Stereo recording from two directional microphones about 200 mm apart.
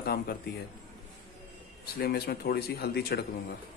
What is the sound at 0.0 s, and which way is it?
Speech, 45° left (ahead or behind).